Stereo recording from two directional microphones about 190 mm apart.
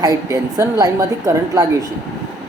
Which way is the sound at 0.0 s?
20° right (ahead or behind).